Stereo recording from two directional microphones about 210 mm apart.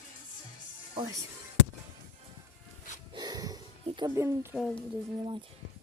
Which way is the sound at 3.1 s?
20° right (ahead or behind).